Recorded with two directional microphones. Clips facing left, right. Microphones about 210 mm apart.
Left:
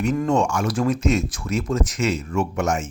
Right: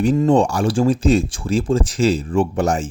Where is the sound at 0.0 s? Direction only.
30° right (ahead or behind).